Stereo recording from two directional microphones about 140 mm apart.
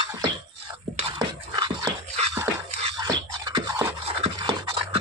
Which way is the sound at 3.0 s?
30° right (ahead or behind).